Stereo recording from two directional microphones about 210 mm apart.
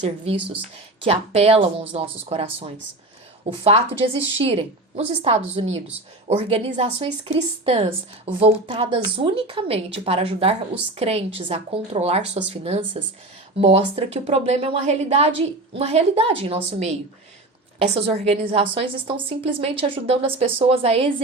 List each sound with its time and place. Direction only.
0.0 s a woman's voice: 30° right (ahead or behind)
3.6 s a woman's voice: 25° right (ahead or behind)